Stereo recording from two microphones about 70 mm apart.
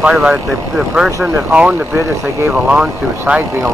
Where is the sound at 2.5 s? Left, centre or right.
Centre.